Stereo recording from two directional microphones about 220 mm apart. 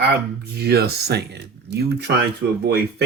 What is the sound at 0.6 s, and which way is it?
Speech, 45° right (ahead or behind).